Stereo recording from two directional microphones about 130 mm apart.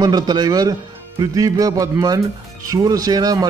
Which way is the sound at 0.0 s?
30° right (ahead or behind).